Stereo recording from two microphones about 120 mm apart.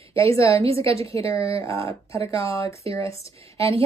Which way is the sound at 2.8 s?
50° right (ahead or behind).